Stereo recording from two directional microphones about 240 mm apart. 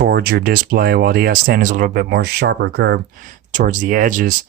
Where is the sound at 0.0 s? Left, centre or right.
Right.